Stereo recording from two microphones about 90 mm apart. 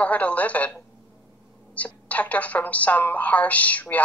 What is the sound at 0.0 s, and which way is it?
Speech, 15° left (ahead or behind).